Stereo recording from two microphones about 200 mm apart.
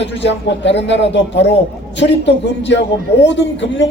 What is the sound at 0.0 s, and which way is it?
A man's voice, 60° left (ahead or behind).